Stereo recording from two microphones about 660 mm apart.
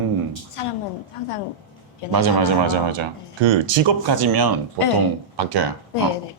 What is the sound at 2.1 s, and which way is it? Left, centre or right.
Speech, right.